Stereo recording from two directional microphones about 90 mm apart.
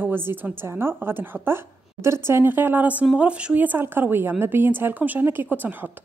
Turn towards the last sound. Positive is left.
turn(degrees=-20)  # may be behind; listen again after turning